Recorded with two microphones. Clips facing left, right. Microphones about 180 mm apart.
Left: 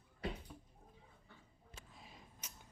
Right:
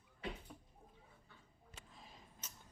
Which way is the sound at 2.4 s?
10° left (ahead or behind).